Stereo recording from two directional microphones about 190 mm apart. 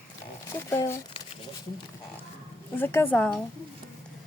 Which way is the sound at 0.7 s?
15° left (ahead or behind).